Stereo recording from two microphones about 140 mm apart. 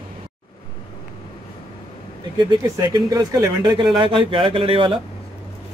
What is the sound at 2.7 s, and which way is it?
Speech, 20° right (ahead or behind).